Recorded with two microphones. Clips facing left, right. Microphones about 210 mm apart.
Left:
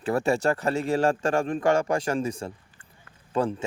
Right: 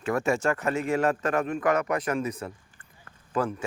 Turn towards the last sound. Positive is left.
turn(degrees=30)  # may be behind; listen again after turning